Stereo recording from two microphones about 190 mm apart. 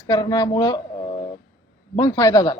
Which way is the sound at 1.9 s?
15° left (ahead or behind).